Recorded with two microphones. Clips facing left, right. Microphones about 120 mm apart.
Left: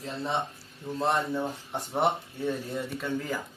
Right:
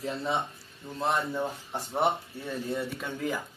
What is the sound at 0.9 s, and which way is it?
Speech, centre (ahead or behind).